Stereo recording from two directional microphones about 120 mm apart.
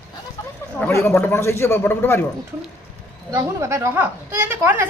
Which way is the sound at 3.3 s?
25° right (ahead or behind).